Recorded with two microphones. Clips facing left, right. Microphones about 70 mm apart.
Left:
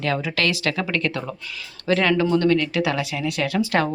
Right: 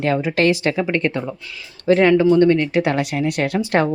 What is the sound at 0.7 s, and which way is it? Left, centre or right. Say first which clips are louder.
Speech: right 4 dB; right.